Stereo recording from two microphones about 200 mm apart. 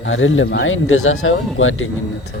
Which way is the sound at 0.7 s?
90° left.